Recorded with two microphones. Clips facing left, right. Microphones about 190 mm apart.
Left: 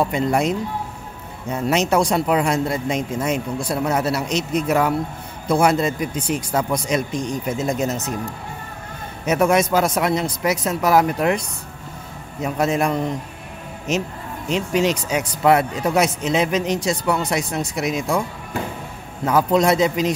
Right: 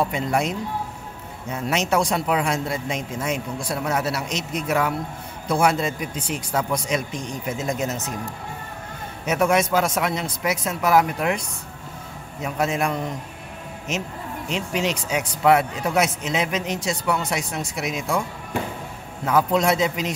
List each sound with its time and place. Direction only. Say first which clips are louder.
0.1 s speech: left 4 dB; 35° left (ahead or behind)
9.2 s speech: left 3 dB; 40° left (ahead or behind)
12.5 s speech: left 4 dB; 35° left (ahead or behind)
19.2 s speech: left 3 dB; 35° left (ahead or behind)